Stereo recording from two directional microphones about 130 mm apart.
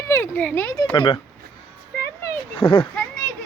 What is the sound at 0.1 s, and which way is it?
Speech, 15° left (ahead or behind).